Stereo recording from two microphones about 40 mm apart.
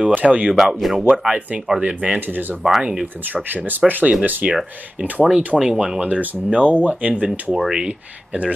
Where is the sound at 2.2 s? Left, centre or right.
Right.